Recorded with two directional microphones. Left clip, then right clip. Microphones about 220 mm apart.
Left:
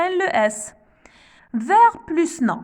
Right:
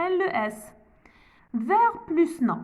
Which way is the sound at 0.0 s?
50° left (ahead or behind).